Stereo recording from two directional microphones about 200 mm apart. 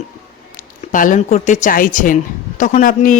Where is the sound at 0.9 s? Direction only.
40° left (ahead or behind).